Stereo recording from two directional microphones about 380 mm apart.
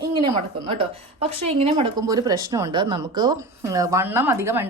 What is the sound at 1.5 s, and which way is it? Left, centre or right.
Speech, centre.